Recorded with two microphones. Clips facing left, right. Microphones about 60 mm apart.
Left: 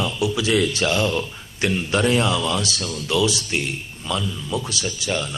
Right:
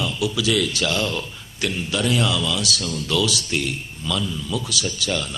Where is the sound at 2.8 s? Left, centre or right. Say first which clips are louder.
Left 3 dB; left.